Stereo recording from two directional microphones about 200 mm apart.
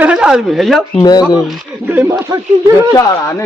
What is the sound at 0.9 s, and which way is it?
Speech, 20° left (ahead or behind).